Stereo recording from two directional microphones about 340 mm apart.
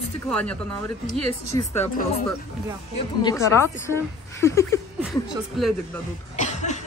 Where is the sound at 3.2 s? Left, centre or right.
Centre.